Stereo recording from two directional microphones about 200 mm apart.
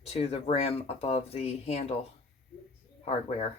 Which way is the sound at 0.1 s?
30° left (ahead or behind).